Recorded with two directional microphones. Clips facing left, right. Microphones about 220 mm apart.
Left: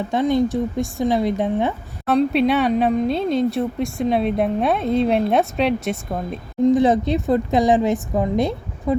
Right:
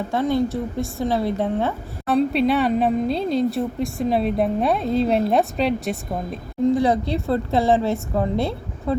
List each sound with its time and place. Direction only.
0.1 s a woman's voice: 15° left (ahead or behind)
2.0 s a woman's voice: centre (ahead or behind)
6.7 s a woman's voice: 20° left (ahead or behind)